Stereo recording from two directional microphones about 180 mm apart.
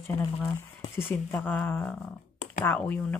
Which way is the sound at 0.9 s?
10° left (ahead or behind).